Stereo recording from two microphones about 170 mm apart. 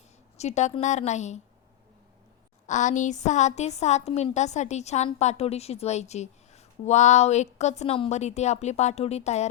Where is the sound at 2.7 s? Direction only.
45° left (ahead or behind).